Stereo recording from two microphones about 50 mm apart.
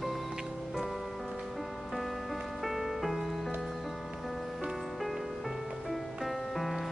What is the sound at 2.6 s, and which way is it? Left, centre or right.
Music, centre.